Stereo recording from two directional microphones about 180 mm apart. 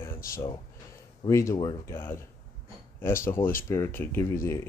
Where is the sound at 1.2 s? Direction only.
15° left (ahead or behind).